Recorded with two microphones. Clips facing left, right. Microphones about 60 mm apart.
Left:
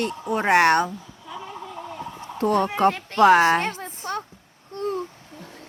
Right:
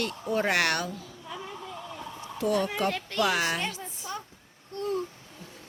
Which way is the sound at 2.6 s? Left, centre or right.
Left.